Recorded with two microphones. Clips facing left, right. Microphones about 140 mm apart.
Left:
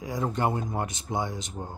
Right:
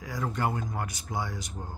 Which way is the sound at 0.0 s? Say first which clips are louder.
Left 3 dB; 20° left (ahead or behind).